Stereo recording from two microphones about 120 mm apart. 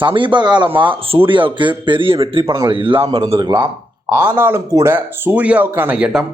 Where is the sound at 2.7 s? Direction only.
45° right (ahead or behind).